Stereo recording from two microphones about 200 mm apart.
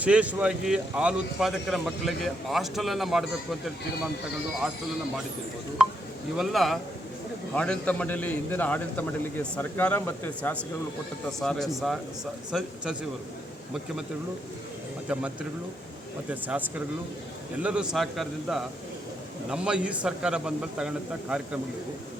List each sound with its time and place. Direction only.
0.0 s speech: 5° right (ahead or behind)
5.8 s a man's voice: 5° right (ahead or behind)
11.7 s speech: centre (ahead or behind)
16.3 s speech: 10° right (ahead or behind)